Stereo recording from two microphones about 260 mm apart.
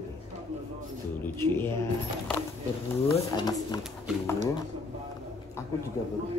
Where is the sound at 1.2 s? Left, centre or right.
Centre.